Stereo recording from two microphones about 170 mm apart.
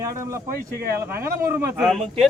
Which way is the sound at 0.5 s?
65° right (ahead or behind).